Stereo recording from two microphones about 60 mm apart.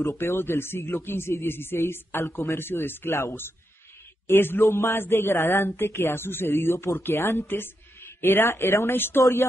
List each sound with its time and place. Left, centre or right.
0.2 s speech: left
4.3 s speech: left
4.6 s speech: left
7.4 s a woman's voice: left